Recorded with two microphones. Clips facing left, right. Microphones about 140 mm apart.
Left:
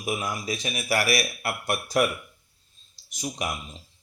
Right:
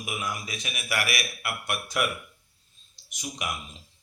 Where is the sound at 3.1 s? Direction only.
35° left (ahead or behind).